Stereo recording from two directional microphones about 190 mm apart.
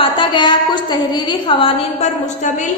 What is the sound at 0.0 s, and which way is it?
A woman's voice, 25° left (ahead or behind).